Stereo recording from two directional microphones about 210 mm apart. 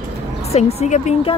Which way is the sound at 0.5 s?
30° left (ahead or behind).